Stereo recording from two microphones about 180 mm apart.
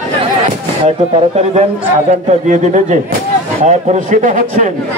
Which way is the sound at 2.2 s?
45° right (ahead or behind).